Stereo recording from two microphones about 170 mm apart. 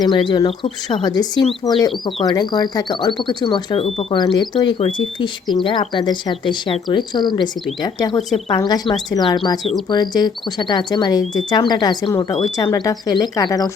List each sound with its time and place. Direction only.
0.0 s speech: 25° left (ahead or behind)